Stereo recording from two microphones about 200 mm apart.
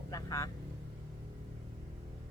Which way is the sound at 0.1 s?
15° left (ahead or behind).